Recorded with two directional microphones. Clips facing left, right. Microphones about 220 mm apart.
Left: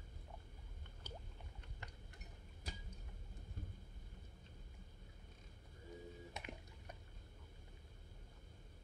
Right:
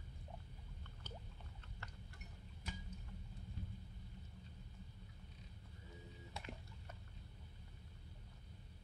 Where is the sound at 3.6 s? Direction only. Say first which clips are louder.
Right 1 dB; 50° left (ahead or behind).